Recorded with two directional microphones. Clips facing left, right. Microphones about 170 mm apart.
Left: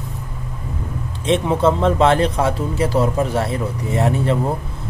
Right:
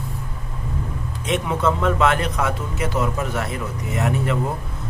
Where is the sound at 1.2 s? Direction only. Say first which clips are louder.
Left 5 dB; 30° left (ahead or behind).